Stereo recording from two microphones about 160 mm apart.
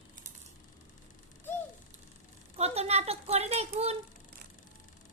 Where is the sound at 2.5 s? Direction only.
40° right (ahead or behind).